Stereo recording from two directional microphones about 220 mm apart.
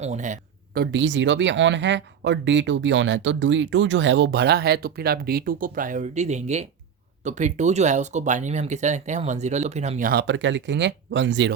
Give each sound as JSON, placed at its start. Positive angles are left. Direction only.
{"t": 0.0, "sound": "speech", "side_deg": -30}